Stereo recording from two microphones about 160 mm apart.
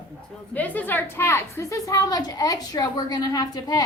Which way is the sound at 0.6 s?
10° left (ahead or behind).